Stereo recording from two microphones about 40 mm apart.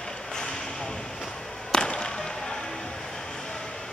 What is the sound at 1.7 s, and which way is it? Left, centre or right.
Basketball bounce, left.